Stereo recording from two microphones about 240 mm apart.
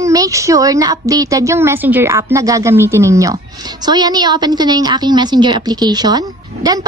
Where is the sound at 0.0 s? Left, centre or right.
Centre.